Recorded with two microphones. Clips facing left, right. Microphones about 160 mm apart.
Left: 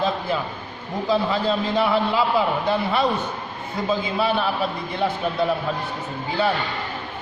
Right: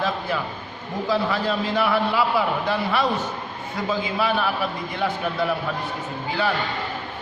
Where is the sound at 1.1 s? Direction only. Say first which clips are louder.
Left 2 dB; 25° left (ahead or behind).